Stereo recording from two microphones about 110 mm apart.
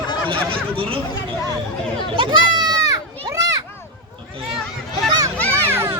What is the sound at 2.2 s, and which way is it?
Goat, 45° right (ahead or behind).